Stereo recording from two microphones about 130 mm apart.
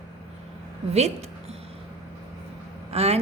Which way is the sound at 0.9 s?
55° right (ahead or behind).